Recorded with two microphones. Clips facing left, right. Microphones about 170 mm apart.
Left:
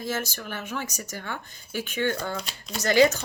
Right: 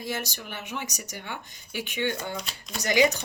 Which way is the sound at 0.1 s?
15° right (ahead or behind).